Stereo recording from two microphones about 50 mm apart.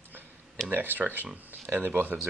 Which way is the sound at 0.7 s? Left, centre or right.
Right.